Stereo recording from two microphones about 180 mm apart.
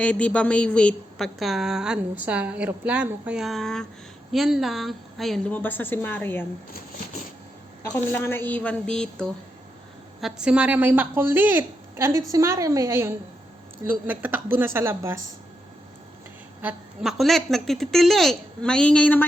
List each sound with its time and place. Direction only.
0.0 s a woman's voice: 5° left (ahead or behind)
7.9 s a woman's voice: 10° left (ahead or behind); by 15.2 s 15° right (ahead or behind)
16.6 s a woman's voice: 5° right (ahead or behind)